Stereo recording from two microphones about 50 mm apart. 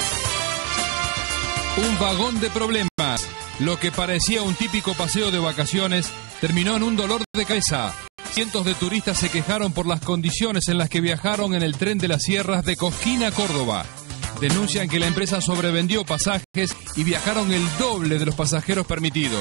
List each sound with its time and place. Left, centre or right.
0.0 s music: right
8.4 s speech: right